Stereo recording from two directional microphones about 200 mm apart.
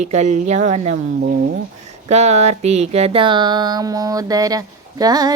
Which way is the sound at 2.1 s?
35° right (ahead or behind).